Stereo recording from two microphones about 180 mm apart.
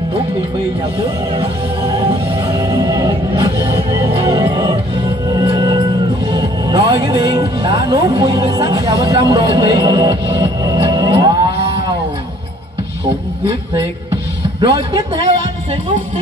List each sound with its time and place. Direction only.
2.4 s music: 20° right (ahead or behind)
6.3 s speech: 25° right (ahead or behind)
14.6 s a man's voice: 25° right (ahead or behind)